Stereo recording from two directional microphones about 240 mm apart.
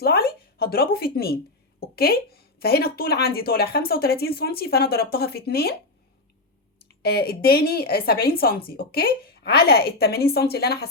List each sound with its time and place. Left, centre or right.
0.0 s a sound: left
1.8 s speech: left
7.0 s speech: left